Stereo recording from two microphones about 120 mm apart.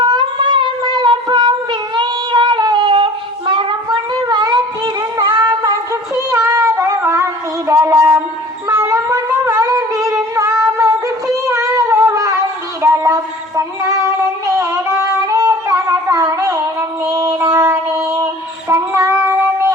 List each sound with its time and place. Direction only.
0.0 s a sound: 40° right (ahead or behind)
0.9 s child singing: 40° right (ahead or behind)
5.1 s a sound: 35° right (ahead or behind)
8.7 s music: 25° right (ahead or behind)
11.4 s cat: 25° right (ahead or behind)
12.8 s child singing: 30° right (ahead or behind)